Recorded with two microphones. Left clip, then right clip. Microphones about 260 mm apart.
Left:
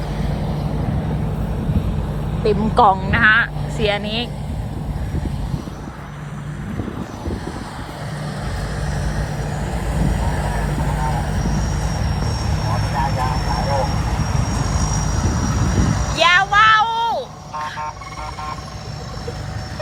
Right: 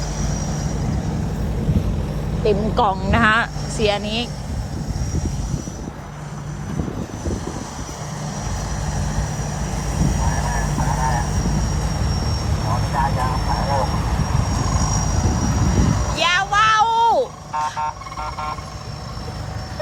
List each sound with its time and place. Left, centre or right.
2.4 s speech: centre
8.9 s vehicle: right
16.1 s frog: centre